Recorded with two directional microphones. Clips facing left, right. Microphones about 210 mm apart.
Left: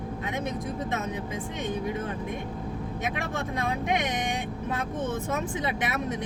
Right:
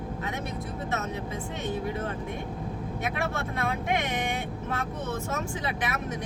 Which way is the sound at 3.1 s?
15° left (ahead or behind).